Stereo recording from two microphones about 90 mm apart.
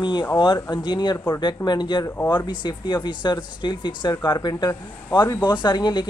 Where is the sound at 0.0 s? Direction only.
60° left (ahead or behind).